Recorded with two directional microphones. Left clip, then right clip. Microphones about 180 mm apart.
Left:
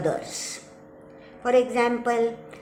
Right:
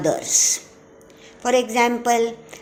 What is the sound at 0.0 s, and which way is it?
A woman's voice, 45° right (ahead or behind).